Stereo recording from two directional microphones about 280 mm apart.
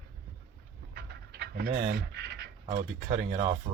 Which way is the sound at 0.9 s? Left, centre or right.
Right.